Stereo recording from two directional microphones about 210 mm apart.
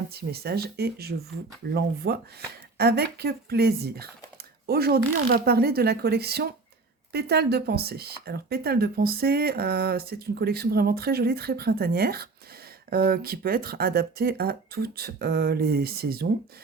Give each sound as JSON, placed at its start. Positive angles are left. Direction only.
{"t": 0.1, "sound": "speech", "side_deg": -50}